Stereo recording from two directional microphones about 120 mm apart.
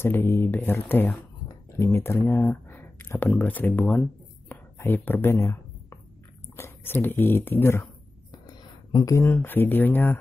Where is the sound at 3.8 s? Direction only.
5° left (ahead or behind).